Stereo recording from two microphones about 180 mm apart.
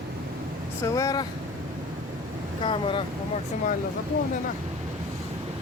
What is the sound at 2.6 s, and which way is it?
Speech, 30° left (ahead or behind).